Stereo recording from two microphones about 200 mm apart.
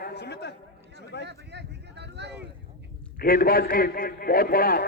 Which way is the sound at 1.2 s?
60° right (ahead or behind).